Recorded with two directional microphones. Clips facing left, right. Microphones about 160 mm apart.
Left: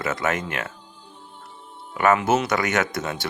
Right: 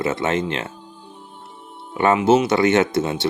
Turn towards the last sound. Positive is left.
turn(degrees=-25)  # may be behind; listen again after turning